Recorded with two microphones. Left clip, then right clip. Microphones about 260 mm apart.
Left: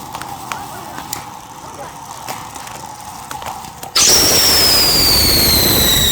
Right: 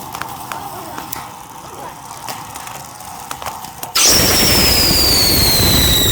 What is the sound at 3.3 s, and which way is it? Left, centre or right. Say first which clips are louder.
Horse: even; centre.